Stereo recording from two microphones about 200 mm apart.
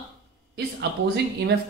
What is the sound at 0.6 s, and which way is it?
Speech, 60° right (ahead or behind).